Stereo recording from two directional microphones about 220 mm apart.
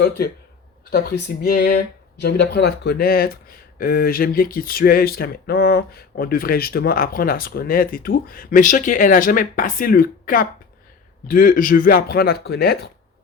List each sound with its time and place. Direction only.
0.9 s speech: 45° left (ahead or behind)